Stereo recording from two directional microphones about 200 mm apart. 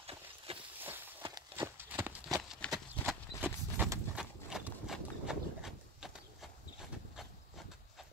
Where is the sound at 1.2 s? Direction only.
20° right (ahead or behind).